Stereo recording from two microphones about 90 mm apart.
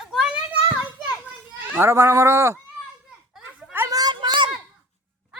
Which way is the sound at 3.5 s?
10° right (ahead or behind).